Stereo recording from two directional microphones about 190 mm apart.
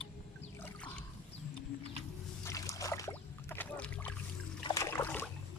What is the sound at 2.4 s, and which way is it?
Rowboat, 15° left (ahead or behind).